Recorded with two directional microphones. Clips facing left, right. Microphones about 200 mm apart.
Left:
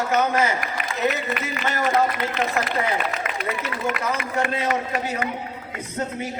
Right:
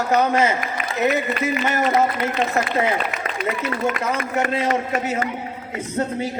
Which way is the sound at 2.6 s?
40° right (ahead or behind).